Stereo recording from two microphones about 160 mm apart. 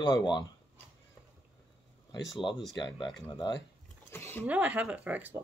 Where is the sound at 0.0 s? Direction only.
25° left (ahead or behind).